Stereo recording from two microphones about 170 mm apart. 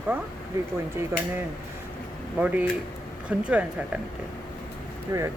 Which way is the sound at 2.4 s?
10° right (ahead or behind).